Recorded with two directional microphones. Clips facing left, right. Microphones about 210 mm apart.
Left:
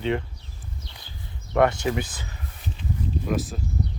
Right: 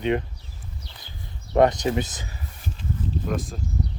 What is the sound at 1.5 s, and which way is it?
Speech, 20° right (ahead or behind).